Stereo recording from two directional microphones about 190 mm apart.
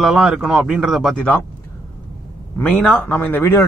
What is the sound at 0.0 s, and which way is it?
Speech, centre (ahead or behind).